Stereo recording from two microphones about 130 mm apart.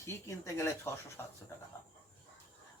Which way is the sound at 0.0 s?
25° left (ahead or behind).